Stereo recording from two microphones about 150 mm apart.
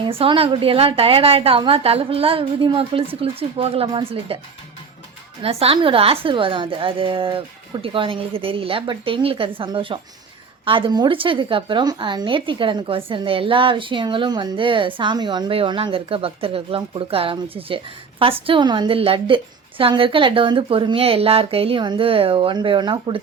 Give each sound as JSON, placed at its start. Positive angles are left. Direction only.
{"t": 0.0, "sound": "a woman's voice", "side_deg": -35}
{"t": 5.4, "sound": "a woman's voice", "side_deg": -40}